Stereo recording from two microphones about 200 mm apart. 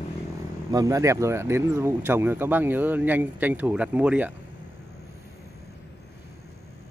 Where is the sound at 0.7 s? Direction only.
15° right (ahead or behind).